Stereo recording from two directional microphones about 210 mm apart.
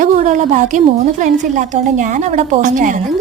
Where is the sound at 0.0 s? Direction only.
35° right (ahead or behind).